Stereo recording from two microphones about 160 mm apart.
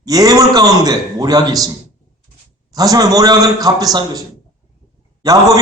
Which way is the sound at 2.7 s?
25° right (ahead or behind).